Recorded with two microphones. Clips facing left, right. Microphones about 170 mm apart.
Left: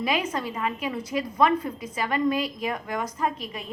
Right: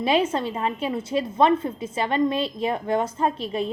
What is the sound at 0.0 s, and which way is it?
A woman's voice, 30° right (ahead or behind).